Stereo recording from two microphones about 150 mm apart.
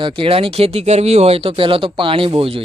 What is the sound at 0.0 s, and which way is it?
Speech, 35° right (ahead or behind).